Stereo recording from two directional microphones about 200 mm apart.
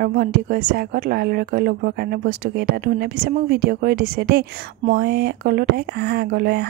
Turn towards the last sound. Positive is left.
turn(degrees=-50)  # may be behind; listen again after turning